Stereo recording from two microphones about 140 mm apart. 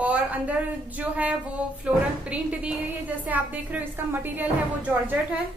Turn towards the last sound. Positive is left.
turn(degrees=-10)  # may be behind; listen again after turning